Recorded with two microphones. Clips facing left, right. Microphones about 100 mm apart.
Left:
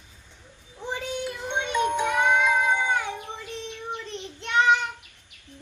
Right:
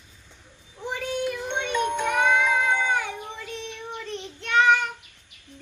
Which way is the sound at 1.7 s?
5° left (ahead or behind).